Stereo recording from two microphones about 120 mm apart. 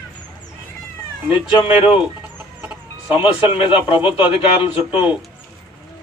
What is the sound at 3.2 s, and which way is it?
A man's voice, 45° left (ahead or behind).